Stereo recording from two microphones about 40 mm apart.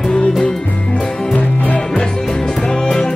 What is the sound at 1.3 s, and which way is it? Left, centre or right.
Music, left.